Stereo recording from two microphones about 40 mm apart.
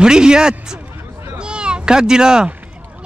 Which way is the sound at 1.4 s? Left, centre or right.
Right.